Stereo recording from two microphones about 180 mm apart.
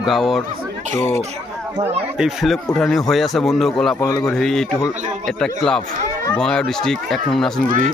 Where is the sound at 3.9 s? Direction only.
15° left (ahead or behind).